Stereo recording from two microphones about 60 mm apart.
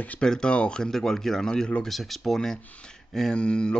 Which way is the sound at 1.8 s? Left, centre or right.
Centre.